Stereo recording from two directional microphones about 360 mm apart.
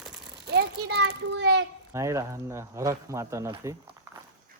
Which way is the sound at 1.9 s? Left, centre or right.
Centre.